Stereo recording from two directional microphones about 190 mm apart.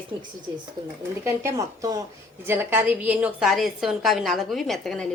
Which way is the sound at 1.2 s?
15° right (ahead or behind).